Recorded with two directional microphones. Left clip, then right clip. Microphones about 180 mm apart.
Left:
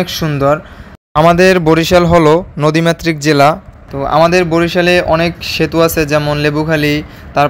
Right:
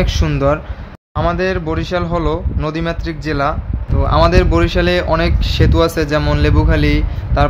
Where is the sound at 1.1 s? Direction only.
45° left (ahead or behind).